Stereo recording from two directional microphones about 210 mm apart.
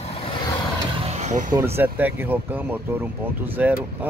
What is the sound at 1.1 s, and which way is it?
Vehicle, 35° right (ahead or behind).